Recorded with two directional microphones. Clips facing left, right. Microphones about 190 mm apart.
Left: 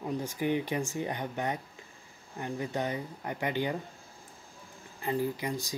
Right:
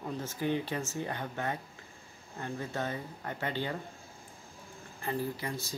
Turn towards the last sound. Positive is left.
turn(degrees=15)  # may be behind; listen again after turning